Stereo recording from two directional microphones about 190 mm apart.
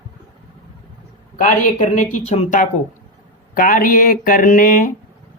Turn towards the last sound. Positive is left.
turn(degrees=45)  # may be behind; listen again after turning